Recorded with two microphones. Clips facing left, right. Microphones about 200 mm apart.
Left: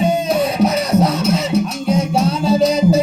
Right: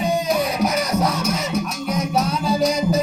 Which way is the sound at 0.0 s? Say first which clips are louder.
Left 4 dB; 25° left (ahead or behind).